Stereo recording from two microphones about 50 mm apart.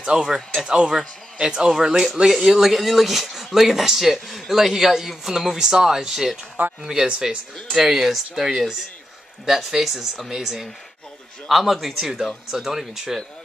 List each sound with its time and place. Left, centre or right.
0.0 s speech: centre